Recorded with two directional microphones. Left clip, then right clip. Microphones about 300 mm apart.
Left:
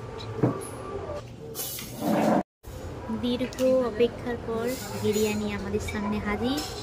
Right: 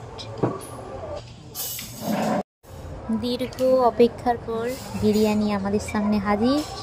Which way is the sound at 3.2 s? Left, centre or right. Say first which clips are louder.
Right 2 dB; centre.